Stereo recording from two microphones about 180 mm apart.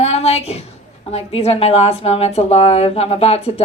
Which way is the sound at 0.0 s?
35° left (ahead or behind).